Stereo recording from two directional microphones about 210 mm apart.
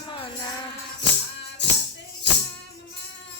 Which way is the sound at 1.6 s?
55° left (ahead or behind).